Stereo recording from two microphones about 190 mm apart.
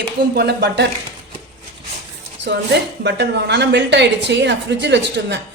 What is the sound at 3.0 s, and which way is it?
A woman's voice, 60° right (ahead or behind).